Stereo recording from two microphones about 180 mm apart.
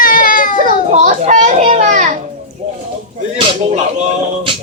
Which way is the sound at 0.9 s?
40° right (ahead or behind).